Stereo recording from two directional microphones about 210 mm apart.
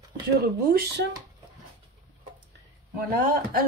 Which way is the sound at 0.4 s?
50° right (ahead or behind).